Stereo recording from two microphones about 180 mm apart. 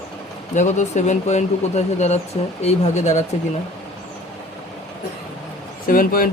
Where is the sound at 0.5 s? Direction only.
40° left (ahead or behind).